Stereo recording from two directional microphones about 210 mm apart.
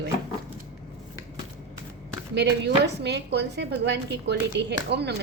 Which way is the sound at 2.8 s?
55° right (ahead or behind).